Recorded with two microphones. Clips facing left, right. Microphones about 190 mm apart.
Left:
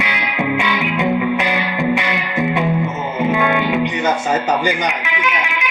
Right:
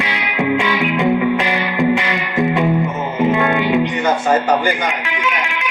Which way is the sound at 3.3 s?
Centre (ahead or behind).